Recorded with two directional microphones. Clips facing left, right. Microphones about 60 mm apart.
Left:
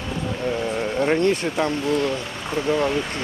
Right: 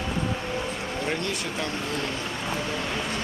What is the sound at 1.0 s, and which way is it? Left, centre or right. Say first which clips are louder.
Speech: left 11 dB; left.